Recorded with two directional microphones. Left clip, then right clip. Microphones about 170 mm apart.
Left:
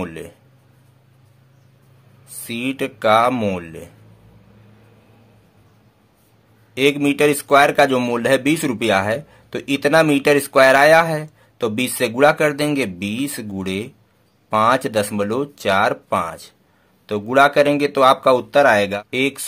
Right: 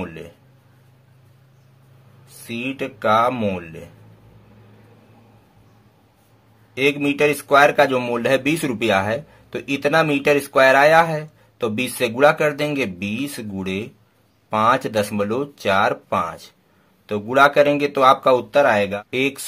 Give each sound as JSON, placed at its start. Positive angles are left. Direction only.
{"t": 0.0, "sound": "a man's voice", "side_deg": 30}
{"t": 2.4, "sound": "a man's voice", "side_deg": 25}
{"t": 6.7, "sound": "a man's voice", "side_deg": 25}